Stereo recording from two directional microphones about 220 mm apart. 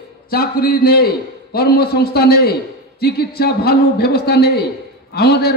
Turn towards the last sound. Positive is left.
turn(degrees=45)  # may be behind; listen again after turning